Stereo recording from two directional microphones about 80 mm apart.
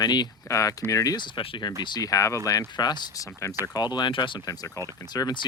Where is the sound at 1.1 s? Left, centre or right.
Left.